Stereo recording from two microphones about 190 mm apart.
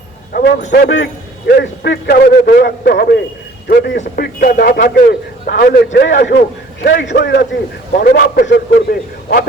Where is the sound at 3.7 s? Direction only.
65° left (ahead or behind).